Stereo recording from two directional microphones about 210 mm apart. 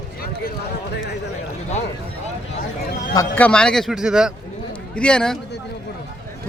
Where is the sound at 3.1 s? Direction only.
5° left (ahead or behind).